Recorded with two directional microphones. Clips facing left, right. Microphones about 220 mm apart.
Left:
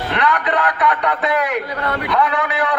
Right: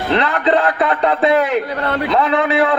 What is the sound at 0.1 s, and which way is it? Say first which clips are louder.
A man's voice: right 5 dB; 25° right (ahead or behind).